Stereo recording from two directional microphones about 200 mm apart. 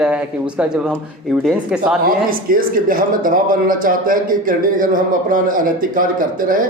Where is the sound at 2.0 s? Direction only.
45° right (ahead or behind).